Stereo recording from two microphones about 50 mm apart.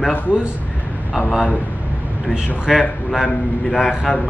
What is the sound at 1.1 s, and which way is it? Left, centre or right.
Speech, centre.